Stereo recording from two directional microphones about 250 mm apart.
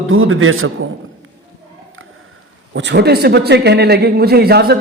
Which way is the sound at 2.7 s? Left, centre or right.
Right.